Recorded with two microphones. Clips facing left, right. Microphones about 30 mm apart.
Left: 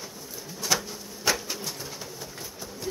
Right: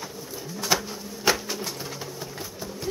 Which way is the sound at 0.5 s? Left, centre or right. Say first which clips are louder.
Right 2 dB; right.